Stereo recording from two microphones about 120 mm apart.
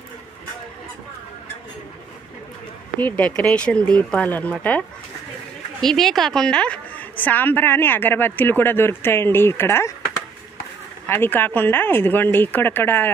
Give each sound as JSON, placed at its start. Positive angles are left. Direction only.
{"t": 3.0, "sound": "a woman's voice", "side_deg": 15}
{"t": 11.1, "sound": "a woman's voice", "side_deg": 15}